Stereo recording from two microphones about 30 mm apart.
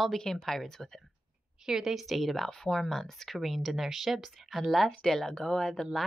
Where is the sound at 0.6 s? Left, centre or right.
Centre.